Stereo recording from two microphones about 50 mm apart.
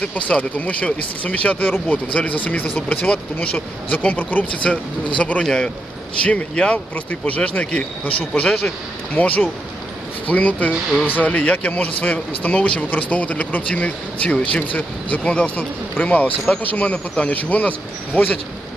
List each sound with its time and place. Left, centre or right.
0.1 s speech: left
4.6 s a man's voice: left